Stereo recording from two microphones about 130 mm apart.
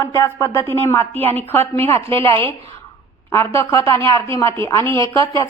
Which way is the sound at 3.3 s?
20° left (ahead or behind).